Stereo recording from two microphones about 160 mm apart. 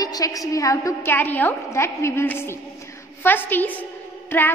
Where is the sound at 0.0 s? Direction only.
20° left (ahead or behind).